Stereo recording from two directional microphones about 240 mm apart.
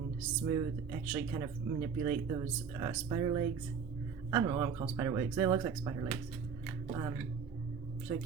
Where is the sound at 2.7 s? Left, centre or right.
Centre.